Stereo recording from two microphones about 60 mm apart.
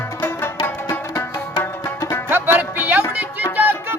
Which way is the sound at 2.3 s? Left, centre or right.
Right.